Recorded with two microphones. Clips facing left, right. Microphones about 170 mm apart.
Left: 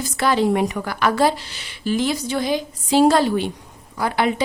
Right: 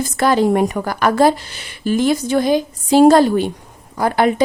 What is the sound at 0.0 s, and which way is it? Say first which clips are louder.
A woman's voice: right 4 dB; 45° right (ahead or behind).